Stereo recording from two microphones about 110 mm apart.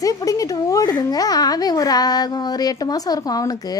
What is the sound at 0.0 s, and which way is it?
A woman's voice, 30° left (ahead or behind).